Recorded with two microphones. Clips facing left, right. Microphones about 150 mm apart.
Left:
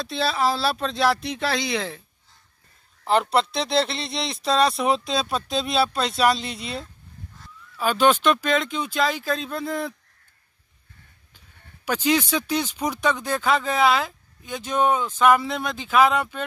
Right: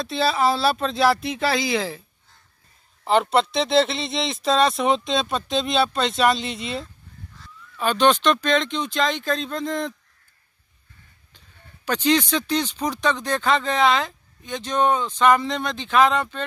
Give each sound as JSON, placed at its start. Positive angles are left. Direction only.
{"t": 0.0, "sound": "speech", "side_deg": 0}
{"t": 11.8, "sound": "speech", "side_deg": 10}